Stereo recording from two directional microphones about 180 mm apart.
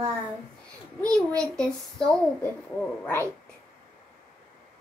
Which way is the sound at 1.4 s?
5° left (ahead or behind).